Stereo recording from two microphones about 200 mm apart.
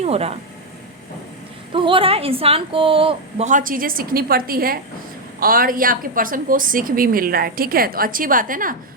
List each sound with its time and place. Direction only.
0.0 s a woman's voice: 30° right (ahead or behind)
1.7 s a woman's voice: 25° right (ahead or behind); by 8.7 s 45° right (ahead or behind)